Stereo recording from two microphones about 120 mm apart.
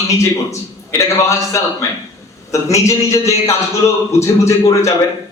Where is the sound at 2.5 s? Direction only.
25° left (ahead or behind).